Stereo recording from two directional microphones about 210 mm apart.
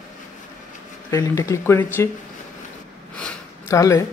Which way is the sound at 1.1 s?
15° left (ahead or behind).